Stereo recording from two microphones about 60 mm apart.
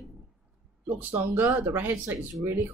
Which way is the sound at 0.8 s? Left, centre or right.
Right.